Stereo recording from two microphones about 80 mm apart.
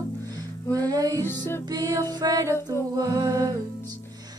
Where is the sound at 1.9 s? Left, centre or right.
Right.